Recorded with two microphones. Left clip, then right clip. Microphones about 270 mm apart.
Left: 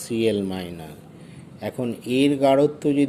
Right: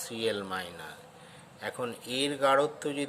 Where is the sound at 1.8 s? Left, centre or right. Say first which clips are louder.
Left 11 dB; centre.